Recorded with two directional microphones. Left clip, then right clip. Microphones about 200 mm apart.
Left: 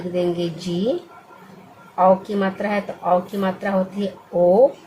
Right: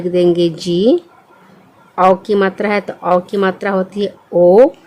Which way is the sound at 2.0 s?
55° right (ahead or behind).